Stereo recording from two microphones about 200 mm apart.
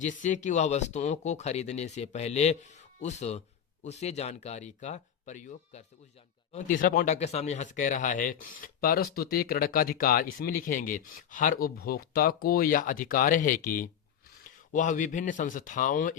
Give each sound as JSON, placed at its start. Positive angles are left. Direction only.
{"t": 0.0, "sound": "a man's voice", "side_deg": 40}